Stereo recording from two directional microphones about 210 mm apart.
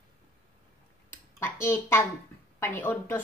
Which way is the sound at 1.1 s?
10° left (ahead or behind).